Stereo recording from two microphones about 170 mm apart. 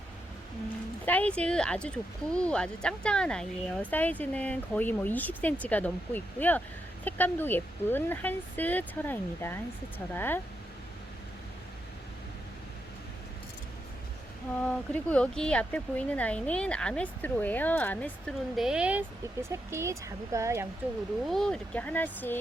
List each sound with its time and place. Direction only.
1.0 s speech: 10° left (ahead or behind)
14.6 s speech: 5° left (ahead or behind)
18.5 s speech: 5° right (ahead or behind)
21.2 s speech: 5° left (ahead or behind)